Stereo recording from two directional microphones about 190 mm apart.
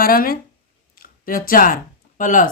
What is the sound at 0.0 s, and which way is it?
Speech, 50° left (ahead or behind).